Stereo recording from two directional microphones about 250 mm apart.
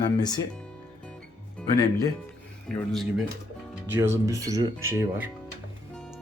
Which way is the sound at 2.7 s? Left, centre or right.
Centre.